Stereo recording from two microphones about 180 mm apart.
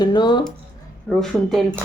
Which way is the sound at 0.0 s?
25° left (ahead or behind).